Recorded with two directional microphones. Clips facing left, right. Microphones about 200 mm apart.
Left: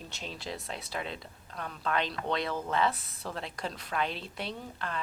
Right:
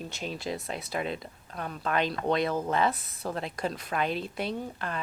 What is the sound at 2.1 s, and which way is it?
A woman's voice, 45° right (ahead or behind).